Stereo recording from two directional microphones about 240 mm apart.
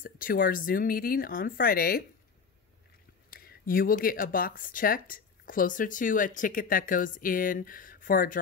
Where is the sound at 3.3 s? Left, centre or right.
Left.